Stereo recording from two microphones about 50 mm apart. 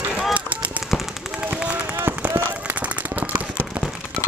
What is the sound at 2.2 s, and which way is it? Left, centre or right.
Run, right.